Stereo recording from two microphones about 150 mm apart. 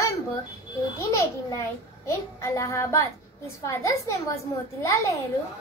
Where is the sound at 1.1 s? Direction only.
20° left (ahead or behind).